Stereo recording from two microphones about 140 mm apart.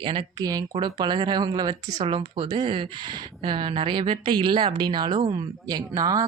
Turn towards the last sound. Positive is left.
turn(degrees=-25)  # may be behind; listen again after turning